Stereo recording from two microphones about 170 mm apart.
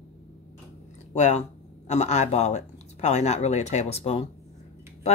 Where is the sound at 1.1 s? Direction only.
40° left (ahead or behind).